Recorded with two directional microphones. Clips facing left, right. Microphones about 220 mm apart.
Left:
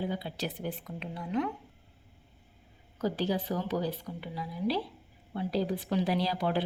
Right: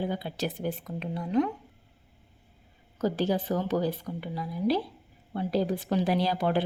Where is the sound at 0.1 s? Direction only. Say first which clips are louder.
Right 3 dB; 45° right (ahead or behind).